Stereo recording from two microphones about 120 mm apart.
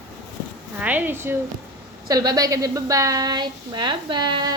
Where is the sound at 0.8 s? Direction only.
15° right (ahead or behind).